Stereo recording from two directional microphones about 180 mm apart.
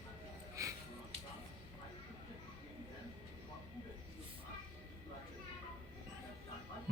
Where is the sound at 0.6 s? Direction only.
15° right (ahead or behind).